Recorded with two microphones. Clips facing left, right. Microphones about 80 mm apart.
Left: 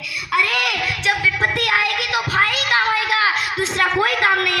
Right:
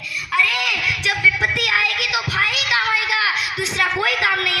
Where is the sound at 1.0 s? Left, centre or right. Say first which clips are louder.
Even; left.